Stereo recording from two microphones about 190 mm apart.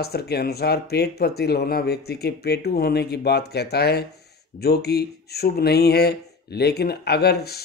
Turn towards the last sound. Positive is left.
turn(degrees=60)  # may be behind; listen again after turning